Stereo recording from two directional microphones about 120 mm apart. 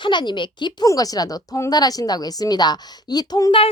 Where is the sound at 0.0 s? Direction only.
40° left (ahead or behind).